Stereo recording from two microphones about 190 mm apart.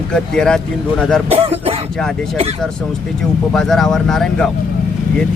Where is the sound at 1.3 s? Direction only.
30° right (ahead or behind).